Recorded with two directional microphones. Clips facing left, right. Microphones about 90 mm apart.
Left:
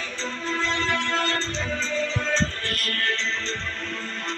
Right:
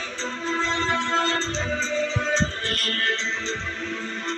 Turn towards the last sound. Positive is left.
turn(degrees=-25)  # may be behind; listen again after turning